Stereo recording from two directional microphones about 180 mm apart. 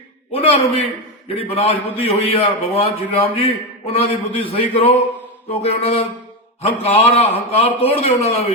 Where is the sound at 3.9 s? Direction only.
30° left (ahead or behind).